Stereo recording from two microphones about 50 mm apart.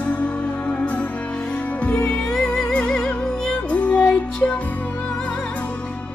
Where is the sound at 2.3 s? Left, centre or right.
Centre; by 4.1 s left.